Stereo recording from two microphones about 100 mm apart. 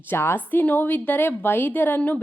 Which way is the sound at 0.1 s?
20° left (ahead or behind).